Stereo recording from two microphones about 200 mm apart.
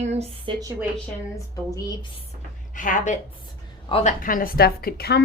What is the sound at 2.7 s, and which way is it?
Speech, 40° left (ahead or behind).